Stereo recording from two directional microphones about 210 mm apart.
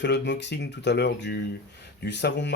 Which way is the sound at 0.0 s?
55° left (ahead or behind).